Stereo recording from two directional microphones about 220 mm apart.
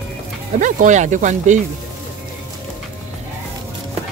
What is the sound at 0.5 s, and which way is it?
Speech, 35° right (ahead or behind).